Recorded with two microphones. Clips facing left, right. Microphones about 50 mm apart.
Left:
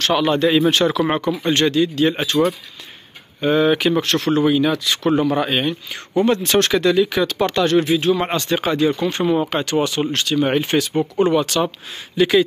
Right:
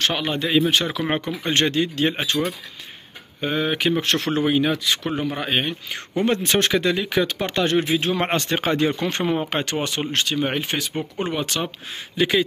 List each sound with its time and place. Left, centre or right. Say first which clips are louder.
0.1 s speech: left 6 dB; centre
1.5 s speech: left 3 dB; right
2.0 s speech: left 3 dB; right
3.3 s speech: left 7 dB; centre
4.0 s speech: left 4 dB; right
5.0 s speech: left 8 dB; centre
6.2 s speech: left 2 dB; right
8.1 s speech: left 4 dB; right
10.4 s speech: left 6 dB; centre
10.9 s speech: left 9 dB; centre